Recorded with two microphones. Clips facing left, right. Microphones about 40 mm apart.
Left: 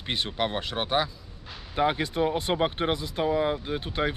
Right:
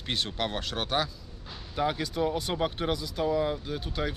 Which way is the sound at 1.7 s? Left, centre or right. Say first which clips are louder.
Left 4 dB; left.